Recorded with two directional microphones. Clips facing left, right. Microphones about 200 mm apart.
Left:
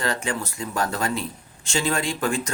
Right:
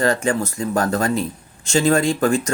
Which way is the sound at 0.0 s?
45° right (ahead or behind).